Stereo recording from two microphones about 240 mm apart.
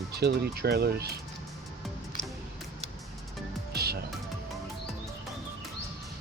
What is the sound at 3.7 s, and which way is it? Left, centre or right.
Music, right.